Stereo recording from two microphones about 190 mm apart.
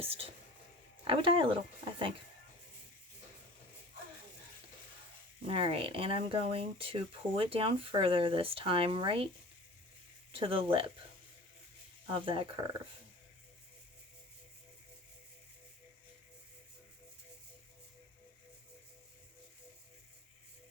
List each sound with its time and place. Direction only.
0.0 s speech: 30° right (ahead or behind)
5.5 s speech: 30° right (ahead or behind)
10.3 s speech: 30° right (ahead or behind)
12.0 s speech: 25° right (ahead or behind)